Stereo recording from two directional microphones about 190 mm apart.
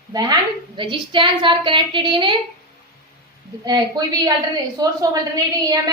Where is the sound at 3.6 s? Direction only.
20° right (ahead or behind).